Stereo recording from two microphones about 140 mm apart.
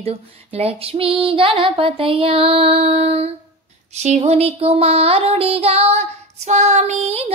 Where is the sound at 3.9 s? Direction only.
55° right (ahead or behind).